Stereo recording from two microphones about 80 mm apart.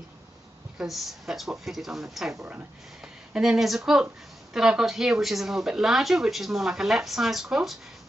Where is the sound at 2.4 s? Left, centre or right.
Centre.